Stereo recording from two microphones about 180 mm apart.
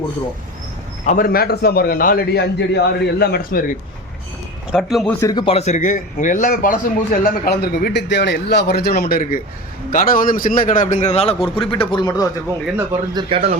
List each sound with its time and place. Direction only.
1.0 s a man's voice: 50° left (ahead or behind)
4.7 s a man's voice: centre (ahead or behind)
5.2 s a man's voice: 25° left (ahead or behind)
11.3 s a man's voice: 5° left (ahead or behind)
11.6 s speech: 30° left (ahead or behind)
13.1 s speech: 35° right (ahead or behind)